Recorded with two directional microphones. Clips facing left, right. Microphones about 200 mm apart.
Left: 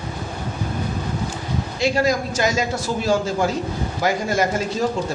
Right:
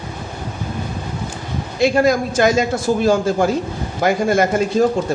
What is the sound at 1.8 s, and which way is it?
A man's voice, 55° right (ahead or behind).